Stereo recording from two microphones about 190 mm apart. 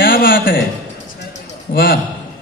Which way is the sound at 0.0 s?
50° left (ahead or behind).